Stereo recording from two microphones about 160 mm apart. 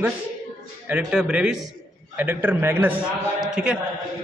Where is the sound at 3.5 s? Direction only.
5° right (ahead or behind).